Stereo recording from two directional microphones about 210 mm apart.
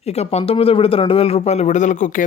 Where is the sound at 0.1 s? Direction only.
30° left (ahead or behind).